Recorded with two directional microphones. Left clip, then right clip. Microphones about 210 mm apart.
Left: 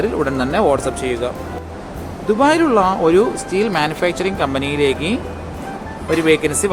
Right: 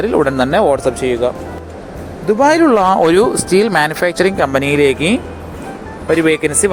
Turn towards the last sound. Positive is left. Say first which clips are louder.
# right 2 dB
turn(degrees=-25)  # may be behind; listen again after turning